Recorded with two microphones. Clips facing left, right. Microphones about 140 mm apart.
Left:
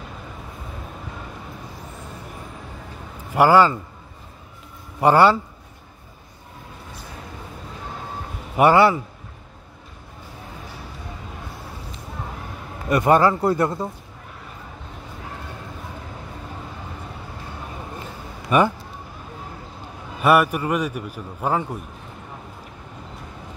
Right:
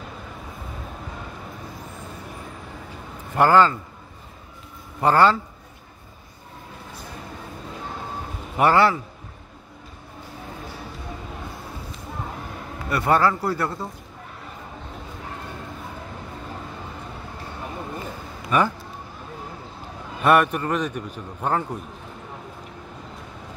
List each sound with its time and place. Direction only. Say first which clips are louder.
3.3 s a man's voice: left 2 dB; 10° left (ahead or behind)
5.0 s a man's voice: left 2 dB; 10° left (ahead or behind)
8.5 s a man's voice: left 3 dB; 10° left (ahead or behind)
12.9 s speech: left 4 dB; 15° left (ahead or behind)
18.5 s a man's voice: left 3 dB; 15° left (ahead or behind)
20.2 s a man's voice: left 1 dB; 5° left (ahead or behind)